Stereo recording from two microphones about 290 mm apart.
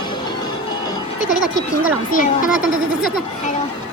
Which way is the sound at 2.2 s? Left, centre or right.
Left.